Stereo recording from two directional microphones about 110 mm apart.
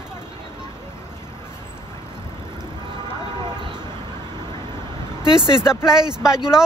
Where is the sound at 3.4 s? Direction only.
40° right (ahead or behind).